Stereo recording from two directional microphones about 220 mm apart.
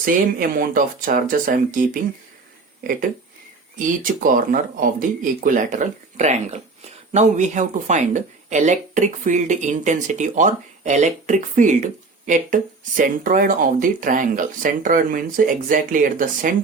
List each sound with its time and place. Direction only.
0.0 s speech: 40° right (ahead or behind)